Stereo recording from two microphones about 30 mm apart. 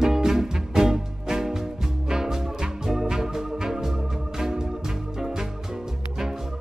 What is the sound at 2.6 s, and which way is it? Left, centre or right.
Organ, centre.